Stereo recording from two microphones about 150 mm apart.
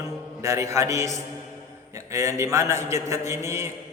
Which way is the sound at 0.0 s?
20° right (ahead or behind).